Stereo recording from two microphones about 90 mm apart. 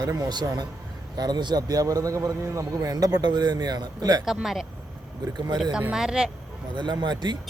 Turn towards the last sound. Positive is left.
turn(degrees=-50)  # may be behind; listen again after turning